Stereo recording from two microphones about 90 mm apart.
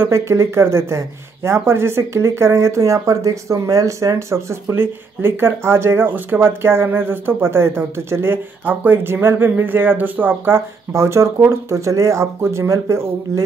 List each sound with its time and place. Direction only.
0.0 s speech: 30° right (ahead or behind)